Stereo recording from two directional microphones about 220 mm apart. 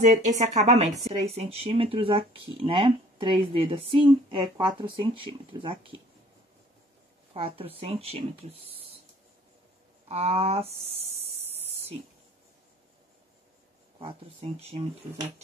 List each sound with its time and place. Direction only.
0.0 s speech: 35° right (ahead or behind)
7.3 s speech: 25° right (ahead or behind)
10.0 s speech: 25° right (ahead or behind)
11.5 s a sound: 25° right (ahead or behind)
13.9 s speech: 25° right (ahead or behind)